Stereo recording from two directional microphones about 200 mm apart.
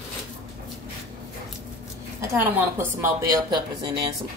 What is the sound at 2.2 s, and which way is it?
A woman's voice, 10° right (ahead or behind).